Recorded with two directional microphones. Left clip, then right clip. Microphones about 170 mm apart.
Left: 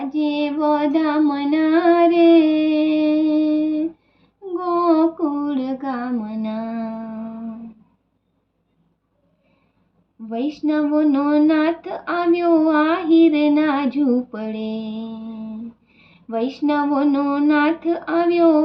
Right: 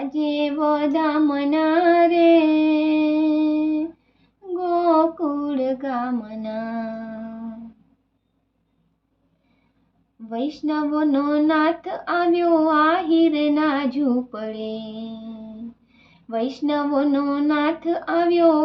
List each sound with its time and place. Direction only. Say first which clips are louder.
0.0 s child singing: left 1 dB; 25° left (ahead or behind)
4.5 s female singing: even; 20° left (ahead or behind)
10.2 s speech: left 3 dB; 20° left (ahead or behind)
14.9 s mantra: left 3 dB; 5° right (ahead or behind)
16.3 s speech: left 2 dB; 20° left (ahead or behind)